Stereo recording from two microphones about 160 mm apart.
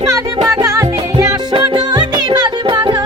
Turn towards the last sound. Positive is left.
turn(degrees=-25)  # may be behind; listen again after turning